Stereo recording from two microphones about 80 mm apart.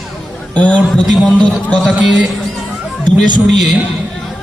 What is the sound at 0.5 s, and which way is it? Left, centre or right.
Speech, centre.